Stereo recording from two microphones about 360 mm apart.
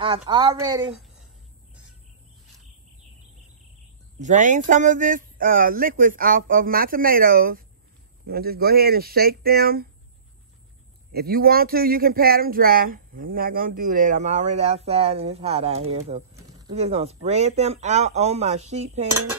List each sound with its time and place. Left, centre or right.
0.0 s speech: centre
4.2 s speech: right
11.1 s speech: right